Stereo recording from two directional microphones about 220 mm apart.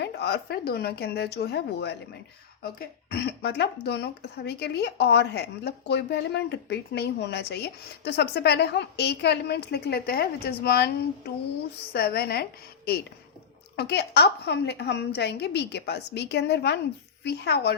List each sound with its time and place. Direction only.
0.0 s speech: 45° left (ahead or behind)
11.9 s speech: 45° left (ahead or behind)